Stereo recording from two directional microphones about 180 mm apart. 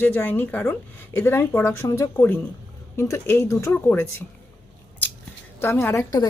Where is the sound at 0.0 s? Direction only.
10° left (ahead or behind).